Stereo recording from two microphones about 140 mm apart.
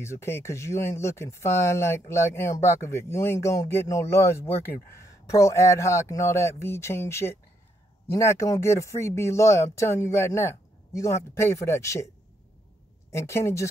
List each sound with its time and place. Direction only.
0.0 s speech: 20° left (ahead or behind)
13.1 s speech: 20° left (ahead or behind)